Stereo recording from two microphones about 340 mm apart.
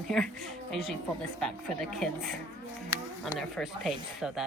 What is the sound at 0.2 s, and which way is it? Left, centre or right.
Speech, centre.